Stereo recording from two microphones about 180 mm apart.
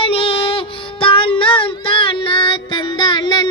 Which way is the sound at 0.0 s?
30° left (ahead or behind).